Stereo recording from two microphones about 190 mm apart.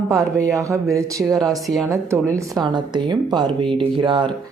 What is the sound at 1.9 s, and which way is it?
A woman's voice, 15° right (ahead or behind).